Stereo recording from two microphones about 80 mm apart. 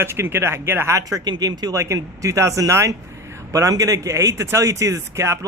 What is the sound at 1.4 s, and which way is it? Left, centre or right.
Speech, right.